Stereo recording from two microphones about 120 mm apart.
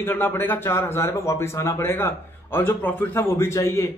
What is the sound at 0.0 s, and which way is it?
A man's voice, 20° left (ahead or behind).